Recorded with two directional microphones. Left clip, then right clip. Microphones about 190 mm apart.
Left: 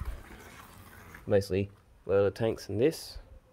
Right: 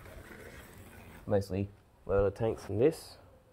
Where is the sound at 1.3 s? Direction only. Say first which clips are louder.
Left 5 dB; 45° left (ahead or behind).